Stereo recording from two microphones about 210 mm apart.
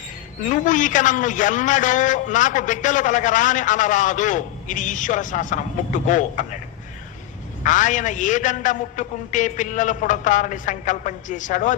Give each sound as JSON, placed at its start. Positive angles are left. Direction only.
{"t": 0.4, "sound": "a man's voice", "side_deg": 35}
{"t": 7.6, "sound": "a man's voice", "side_deg": 35}